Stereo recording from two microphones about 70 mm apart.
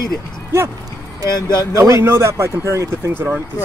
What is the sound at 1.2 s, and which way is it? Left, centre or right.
Speech, left.